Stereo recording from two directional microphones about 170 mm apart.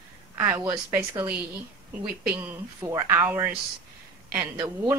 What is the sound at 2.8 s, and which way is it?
Speech, 15° right (ahead or behind).